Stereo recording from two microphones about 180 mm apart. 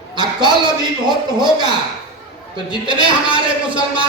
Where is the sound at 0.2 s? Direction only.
25° right (ahead or behind).